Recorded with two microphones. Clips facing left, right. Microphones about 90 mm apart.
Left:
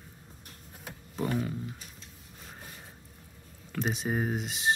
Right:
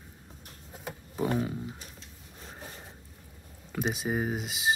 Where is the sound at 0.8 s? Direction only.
10° right (ahead or behind).